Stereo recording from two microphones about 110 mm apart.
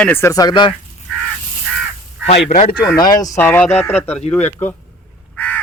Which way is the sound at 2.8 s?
30° left (ahead or behind).